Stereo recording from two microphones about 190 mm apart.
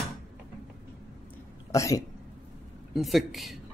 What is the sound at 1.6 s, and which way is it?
Speech, 15° left (ahead or behind).